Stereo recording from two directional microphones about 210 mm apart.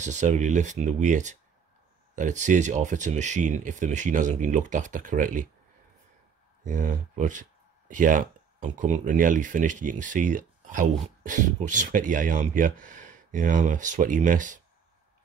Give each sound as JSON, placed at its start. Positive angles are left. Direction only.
{"t": 0.0, "sound": "speech", "side_deg": -35}
{"t": 6.6, "sound": "speech", "side_deg": -40}